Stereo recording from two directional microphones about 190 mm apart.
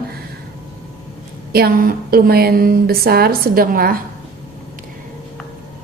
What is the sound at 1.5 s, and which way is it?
A woman's voice, 55° right (ahead or behind).